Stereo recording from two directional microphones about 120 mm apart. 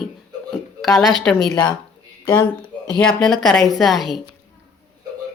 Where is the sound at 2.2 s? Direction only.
20° left (ahead or behind).